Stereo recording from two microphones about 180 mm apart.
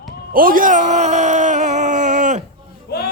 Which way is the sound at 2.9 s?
60° left (ahead or behind).